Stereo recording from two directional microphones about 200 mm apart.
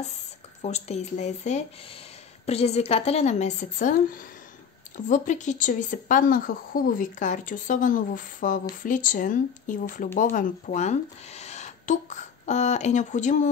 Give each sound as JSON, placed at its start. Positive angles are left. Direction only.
{"t": 0.6, "sound": "speech", "side_deg": 35}